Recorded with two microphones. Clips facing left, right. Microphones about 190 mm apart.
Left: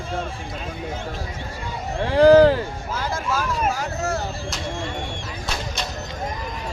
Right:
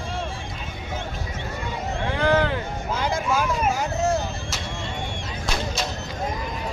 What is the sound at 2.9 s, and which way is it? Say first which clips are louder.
Speech: right 2 dB; 15° right (ahead or behind).